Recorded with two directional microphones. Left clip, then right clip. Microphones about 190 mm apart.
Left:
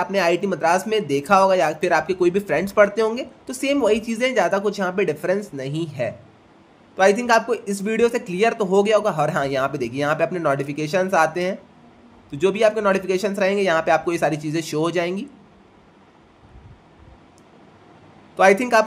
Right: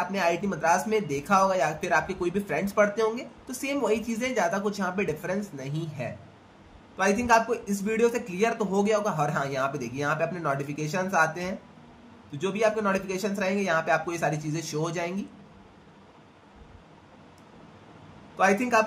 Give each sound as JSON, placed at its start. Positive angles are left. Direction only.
{"t": 0.0, "sound": "speech", "side_deg": 50}
{"t": 18.3, "sound": "a man's voice", "side_deg": 55}